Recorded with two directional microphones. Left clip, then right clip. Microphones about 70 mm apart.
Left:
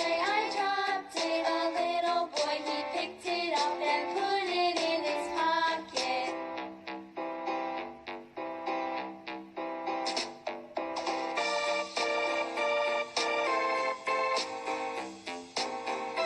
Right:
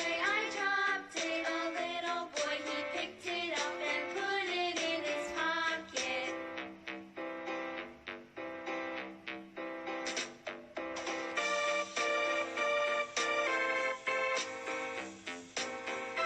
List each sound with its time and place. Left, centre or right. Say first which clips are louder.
0.0 s music: left 4 dB; left